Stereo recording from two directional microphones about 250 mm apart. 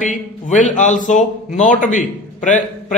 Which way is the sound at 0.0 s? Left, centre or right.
Left.